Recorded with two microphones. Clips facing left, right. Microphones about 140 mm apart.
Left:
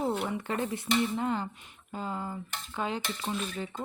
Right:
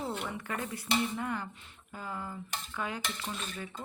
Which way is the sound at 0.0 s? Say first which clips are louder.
Left 6 dB; 40° left (ahead or behind).